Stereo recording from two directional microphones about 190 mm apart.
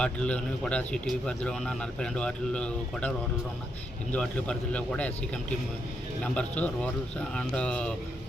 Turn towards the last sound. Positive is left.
turn(degrees=5)  # may be behind; listen again after turning